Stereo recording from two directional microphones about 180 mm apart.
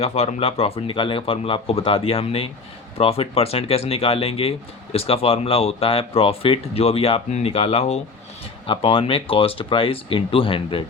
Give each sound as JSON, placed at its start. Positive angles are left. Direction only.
{"t": 0.0, "sound": "speech", "side_deg": 35}